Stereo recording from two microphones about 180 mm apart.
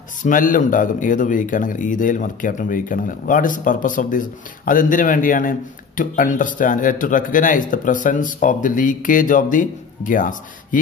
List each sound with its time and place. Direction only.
0.2 s speech: 45° left (ahead or behind)